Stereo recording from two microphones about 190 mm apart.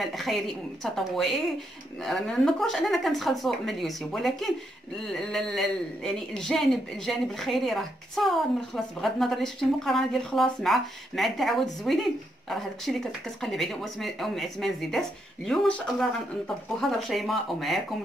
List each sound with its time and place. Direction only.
0.0 s a man's voice: centre (ahead or behind)